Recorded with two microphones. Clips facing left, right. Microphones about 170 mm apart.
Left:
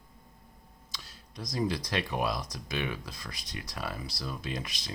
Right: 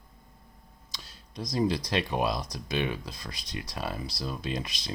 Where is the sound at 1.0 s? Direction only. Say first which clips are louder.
Right 5 dB; 25° right (ahead or behind).